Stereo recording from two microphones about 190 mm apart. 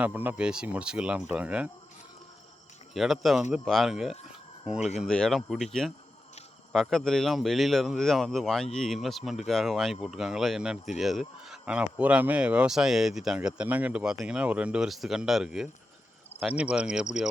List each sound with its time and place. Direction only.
0.0 s speech: 10° right (ahead or behind)
2.9 s speech: centre (ahead or behind)
4.3 s a sound: 5° right (ahead or behind)
4.9 s speech: 5° left (ahead or behind)